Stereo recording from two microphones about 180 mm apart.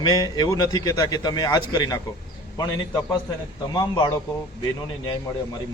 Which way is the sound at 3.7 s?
20° left (ahead or behind).